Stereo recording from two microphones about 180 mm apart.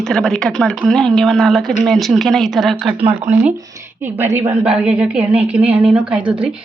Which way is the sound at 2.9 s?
30° right (ahead or behind).